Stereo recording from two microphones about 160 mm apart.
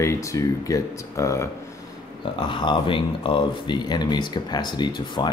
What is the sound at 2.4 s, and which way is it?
Speech, 30° left (ahead or behind).